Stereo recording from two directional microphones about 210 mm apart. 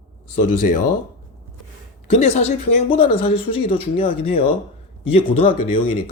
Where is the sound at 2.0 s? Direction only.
35° left (ahead or behind).